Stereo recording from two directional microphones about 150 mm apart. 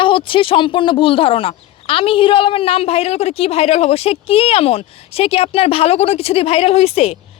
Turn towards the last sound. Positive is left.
turn(degrees=40)  # may be behind; listen again after turning